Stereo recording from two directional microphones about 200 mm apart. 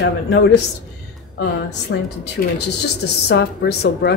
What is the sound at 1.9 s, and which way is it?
Speech, 60° left (ahead or behind).